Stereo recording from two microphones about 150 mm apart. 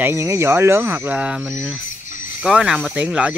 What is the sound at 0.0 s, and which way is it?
Speech, 15° right (ahead or behind).